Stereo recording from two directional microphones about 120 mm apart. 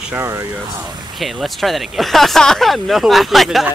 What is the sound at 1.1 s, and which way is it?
Speech, centre (ahead or behind).